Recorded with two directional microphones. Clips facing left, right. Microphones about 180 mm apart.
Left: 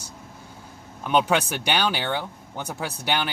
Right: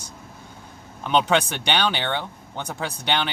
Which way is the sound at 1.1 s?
5° left (ahead or behind).